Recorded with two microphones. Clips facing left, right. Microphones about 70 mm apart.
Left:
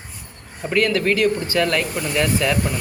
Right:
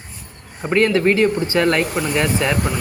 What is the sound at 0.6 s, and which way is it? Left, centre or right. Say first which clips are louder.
Speech: right 3 dB; right.